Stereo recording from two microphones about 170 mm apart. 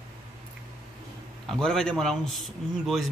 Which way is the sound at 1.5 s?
5° left (ahead or behind).